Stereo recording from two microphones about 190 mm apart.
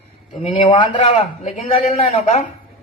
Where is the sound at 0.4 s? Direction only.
30° left (ahead or behind).